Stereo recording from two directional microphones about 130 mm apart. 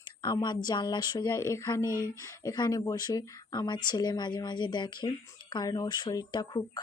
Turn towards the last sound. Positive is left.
turn(degrees=35)  # may be behind; listen again after turning